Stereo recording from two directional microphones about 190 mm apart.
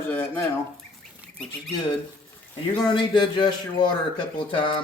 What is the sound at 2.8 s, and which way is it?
Speech, 25° left (ahead or behind).